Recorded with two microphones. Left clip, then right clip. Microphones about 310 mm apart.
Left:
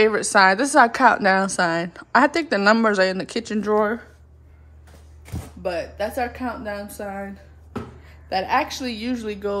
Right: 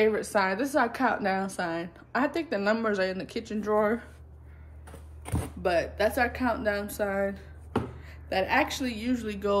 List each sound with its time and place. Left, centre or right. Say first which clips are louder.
0.0 s a woman's voice: left 9 dB; left
5.6 s a woman's voice: even; centre